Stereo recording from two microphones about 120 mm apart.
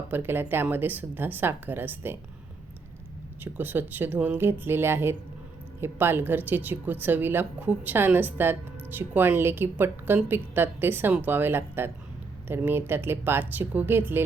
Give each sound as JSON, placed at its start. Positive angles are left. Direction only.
{"t": 0.1, "sound": "speech", "side_deg": -20}
{"t": 3.4, "sound": "speech", "side_deg": -15}